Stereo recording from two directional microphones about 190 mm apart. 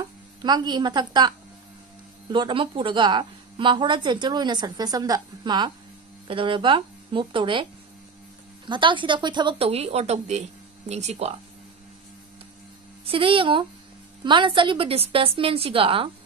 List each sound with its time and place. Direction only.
0.4 s a woman's voice: 20° right (ahead or behind)
2.3 s a woman's voice: 25° right (ahead or behind)
8.6 s a woman's voice: 25° right (ahead or behind)
13.0 s a woman's voice: 30° right (ahead or behind)